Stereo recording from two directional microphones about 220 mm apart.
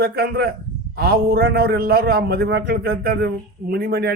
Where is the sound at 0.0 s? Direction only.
45° right (ahead or behind).